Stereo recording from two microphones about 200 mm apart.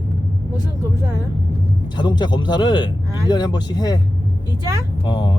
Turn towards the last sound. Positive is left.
turn(degrees=20)  # may be behind; listen again after turning